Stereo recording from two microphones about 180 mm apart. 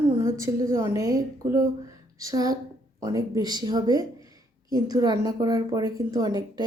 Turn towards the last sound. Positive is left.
turn(degrees=-20)  # may be behind; listen again after turning